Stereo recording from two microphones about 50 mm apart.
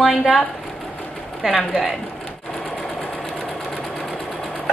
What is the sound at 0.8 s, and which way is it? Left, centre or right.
Sewing machine, left.